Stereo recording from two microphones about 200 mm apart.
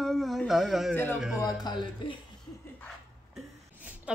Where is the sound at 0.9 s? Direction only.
10° left (ahead or behind).